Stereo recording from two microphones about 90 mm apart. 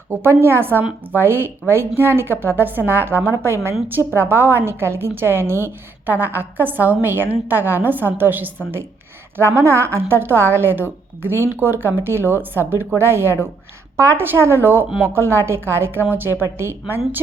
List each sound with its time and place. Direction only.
0.1 s a woman's voice: 25° right (ahead or behind)